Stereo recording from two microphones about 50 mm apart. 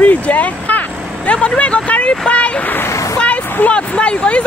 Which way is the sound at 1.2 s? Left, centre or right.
Left.